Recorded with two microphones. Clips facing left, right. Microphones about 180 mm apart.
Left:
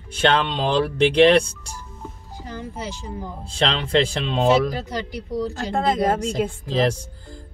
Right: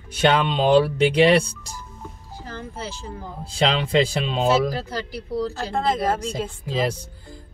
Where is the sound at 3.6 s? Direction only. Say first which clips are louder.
Right 1 dB; 10° right (ahead or behind).